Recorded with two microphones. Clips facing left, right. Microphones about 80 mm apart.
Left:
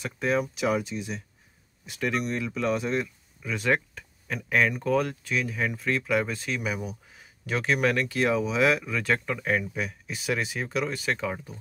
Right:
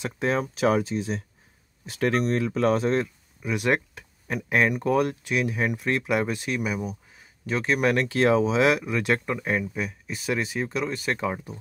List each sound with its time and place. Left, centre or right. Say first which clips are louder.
0.0 s speech: right 1 dB; right
3.4 s speech: right 2 dB; centre
7.8 s speech: right 5 dB; right
9.5 s speech: left 1 dB; centre
11.1 s speech: right 3 dB; centre